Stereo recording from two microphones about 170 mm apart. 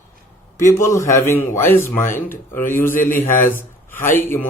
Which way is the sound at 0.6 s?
15° left (ahead or behind).